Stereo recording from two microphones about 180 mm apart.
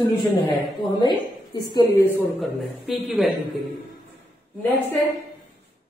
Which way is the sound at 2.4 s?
Centre (ahead or behind).